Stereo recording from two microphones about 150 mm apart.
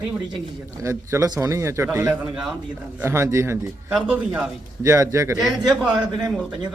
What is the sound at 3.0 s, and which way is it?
Speech, 15° right (ahead or behind).